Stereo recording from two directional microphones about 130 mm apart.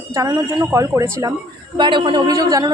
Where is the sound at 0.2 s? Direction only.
25° right (ahead or behind).